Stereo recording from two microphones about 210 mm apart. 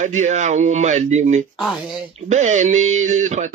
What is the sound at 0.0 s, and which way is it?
Speech, 35° right (ahead or behind).